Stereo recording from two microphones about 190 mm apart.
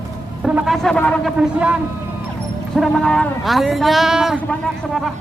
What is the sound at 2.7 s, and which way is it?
Speech, centre (ahead or behind).